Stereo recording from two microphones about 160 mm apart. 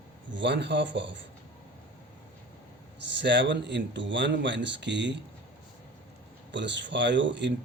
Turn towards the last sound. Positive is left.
turn(degrees=-90)